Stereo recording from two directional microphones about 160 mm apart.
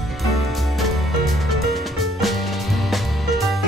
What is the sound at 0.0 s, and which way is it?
Music, centre (ahead or behind).